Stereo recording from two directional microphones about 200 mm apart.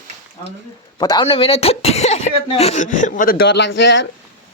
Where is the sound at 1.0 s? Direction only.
20° left (ahead or behind); by 4.1 s 65° left (ahead or behind).